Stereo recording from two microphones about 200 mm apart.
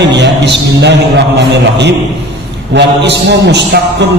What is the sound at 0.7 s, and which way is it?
A man's voice, 60° right (ahead or behind).